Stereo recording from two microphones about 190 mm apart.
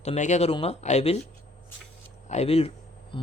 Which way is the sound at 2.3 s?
35° left (ahead or behind).